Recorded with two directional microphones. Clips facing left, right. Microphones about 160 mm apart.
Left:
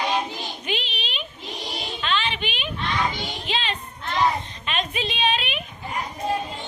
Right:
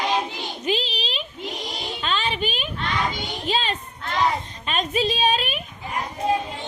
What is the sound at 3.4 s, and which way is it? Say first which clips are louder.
Child singing: right 4 dB; 40° right (ahead or behind).